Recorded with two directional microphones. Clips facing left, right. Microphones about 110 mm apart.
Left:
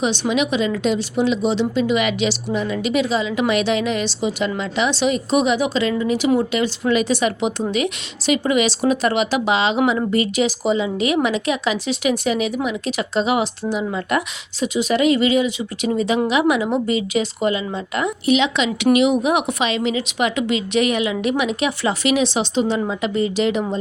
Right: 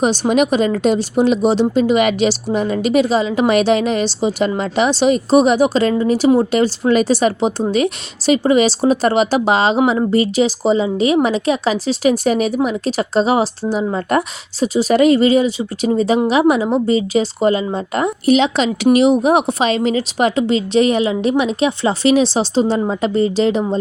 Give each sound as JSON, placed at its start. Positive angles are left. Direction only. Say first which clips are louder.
{"t": 0.0, "sound": "speech", "louder": "right 5 dB", "side_deg": -45}